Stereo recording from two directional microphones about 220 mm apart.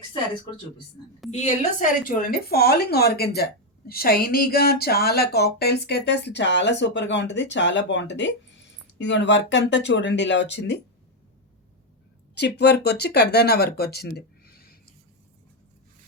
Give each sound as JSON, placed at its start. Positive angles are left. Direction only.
{"t": 1.3, "sound": "speech", "side_deg": 30}
{"t": 12.3, "sound": "speech", "side_deg": 50}